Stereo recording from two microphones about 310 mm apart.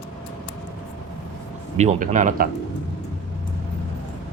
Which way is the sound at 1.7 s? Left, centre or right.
Right.